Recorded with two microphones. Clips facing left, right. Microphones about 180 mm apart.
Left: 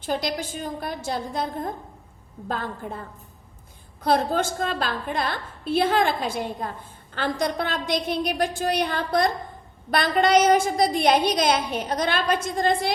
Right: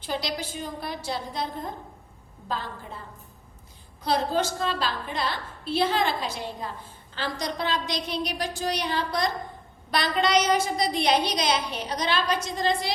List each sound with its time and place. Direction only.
0.0 s a woman's voice: 50° left (ahead or behind)
4.0 s a woman's voice: 50° left (ahead or behind)